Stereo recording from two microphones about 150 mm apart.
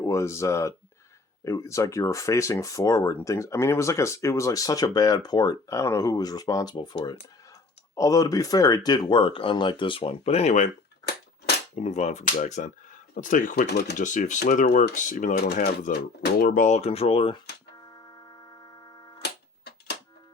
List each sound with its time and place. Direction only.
0.0 s speech: 20° left (ahead or behind); by 10.7 s 50° left (ahead or behind)
11.7 s speech: 45° left (ahead or behind); by 14.0 s 90° left
14.0 s speech: 55° left (ahead or behind); by 17.4 s 40° left (ahead or behind)
19.2 s a sound: 90° left